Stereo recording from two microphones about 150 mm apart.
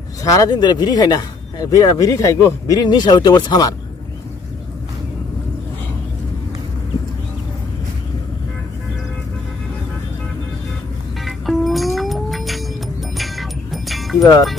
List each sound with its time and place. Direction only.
0.2 s speech: 25° left (ahead or behind)
11.2 s music: centre (ahead or behind)